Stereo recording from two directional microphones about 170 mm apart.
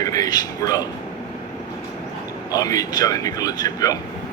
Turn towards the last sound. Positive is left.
turn(degrees=20)  # may be behind; listen again after turning